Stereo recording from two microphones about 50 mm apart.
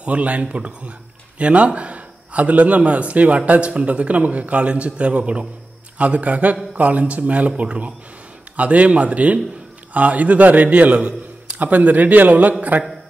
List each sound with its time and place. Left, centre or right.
0.0 s a man's voice: right
11.0 s a sound: centre
11.6 s a man's voice: right